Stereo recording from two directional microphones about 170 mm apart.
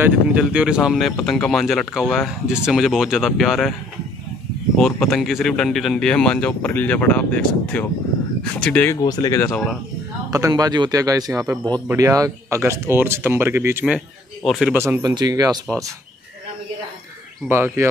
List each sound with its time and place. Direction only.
0.0 s speech: 5° right (ahead or behind)
5.0 s a man's voice: centre (ahead or behind)
9.0 s speech: 20° left (ahead or behind)
9.4 s speech: centre (ahead or behind)
10.3 s a man's voice: 20° right (ahead or behind)
13.9 s a man's voice: centre (ahead or behind)
15.0 s a man's voice: 25° right (ahead or behind)
17.5 s speech: 15° right (ahead or behind)